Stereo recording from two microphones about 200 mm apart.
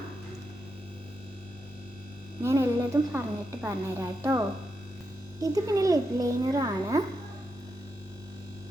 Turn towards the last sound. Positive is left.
turn(degrees=-20)  # may be behind; listen again after turning